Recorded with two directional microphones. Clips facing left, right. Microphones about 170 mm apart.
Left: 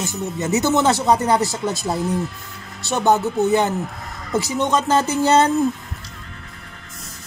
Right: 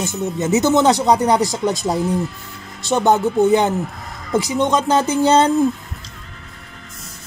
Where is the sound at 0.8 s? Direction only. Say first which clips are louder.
Right 3 dB; 15° right (ahead or behind).